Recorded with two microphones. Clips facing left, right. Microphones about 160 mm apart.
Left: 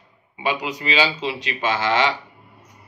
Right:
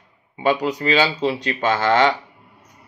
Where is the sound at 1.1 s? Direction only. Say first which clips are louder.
Right 5 dB; 50° right (ahead or behind).